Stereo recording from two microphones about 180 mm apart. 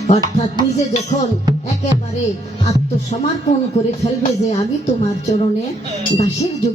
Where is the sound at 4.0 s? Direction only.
35° left (ahead or behind).